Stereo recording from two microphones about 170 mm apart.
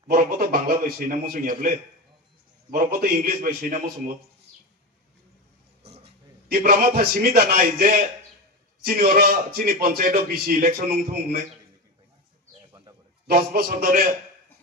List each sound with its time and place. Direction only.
0.1 s a man's voice: 55° right (ahead or behind)
5.9 s a sound: 35° right (ahead or behind)
6.5 s a man's voice: 55° right (ahead or behind)
13.3 s a man's voice: 55° right (ahead or behind)